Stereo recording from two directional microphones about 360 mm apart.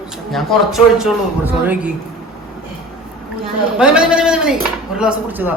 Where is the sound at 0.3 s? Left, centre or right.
Centre.